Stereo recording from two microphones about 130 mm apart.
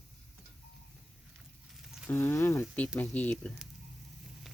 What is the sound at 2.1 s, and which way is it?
Speech, 15° left (ahead or behind).